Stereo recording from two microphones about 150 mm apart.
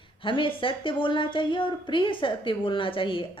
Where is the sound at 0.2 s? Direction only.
35° left (ahead or behind).